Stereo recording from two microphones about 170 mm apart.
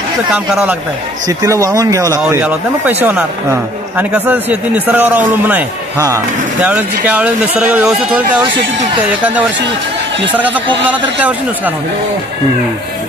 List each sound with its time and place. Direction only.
0.3 s speech: 5° right (ahead or behind)
1.2 s a man's voice: 20° right (ahead or behind)